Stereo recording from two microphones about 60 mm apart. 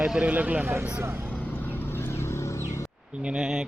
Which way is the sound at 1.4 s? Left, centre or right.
Left.